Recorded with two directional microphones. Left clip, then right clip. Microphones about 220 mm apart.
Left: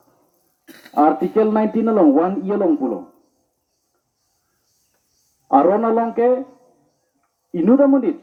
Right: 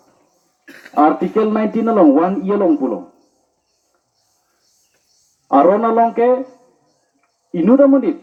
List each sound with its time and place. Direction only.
0.6 s a sound: 50° left (ahead or behind)
0.9 s speech: 40° right (ahead or behind)
5.5 s speech: 35° right (ahead or behind)
7.5 s speech: 35° right (ahead or behind)